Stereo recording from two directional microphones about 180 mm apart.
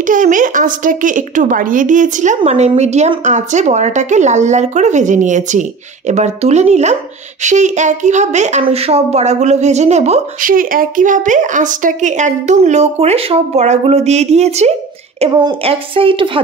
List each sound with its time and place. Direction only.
0.0 s speech: 45° right (ahead or behind); by 16.3 s 30° right (ahead or behind)